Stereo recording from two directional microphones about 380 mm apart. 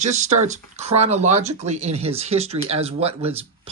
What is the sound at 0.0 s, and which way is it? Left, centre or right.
Speech, centre.